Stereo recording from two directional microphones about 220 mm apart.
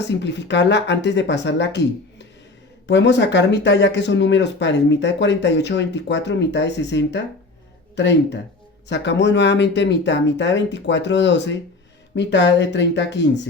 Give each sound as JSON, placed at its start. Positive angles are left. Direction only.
{"t": 0.1, "sound": "speech", "side_deg": 50}